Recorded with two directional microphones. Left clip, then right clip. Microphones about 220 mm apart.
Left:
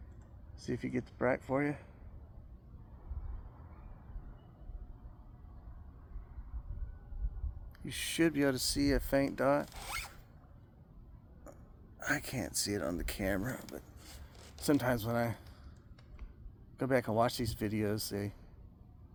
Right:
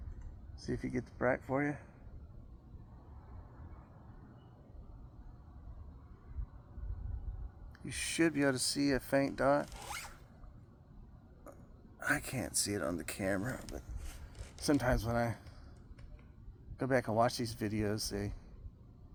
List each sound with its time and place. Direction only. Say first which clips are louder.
0.6 s speech: left 1 dB; 15° left (ahead or behind)
7.9 s speech: left 1 dB; 15° left (ahead or behind)
11.9 s speech: right 1 dB; 10° left (ahead or behind)
13.7 s a sound: left 1 dB; 25° left (ahead or behind)
16.7 s speech: left 1 dB; 15° left (ahead or behind)